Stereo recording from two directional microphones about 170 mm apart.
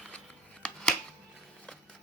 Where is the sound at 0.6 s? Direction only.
5° left (ahead or behind).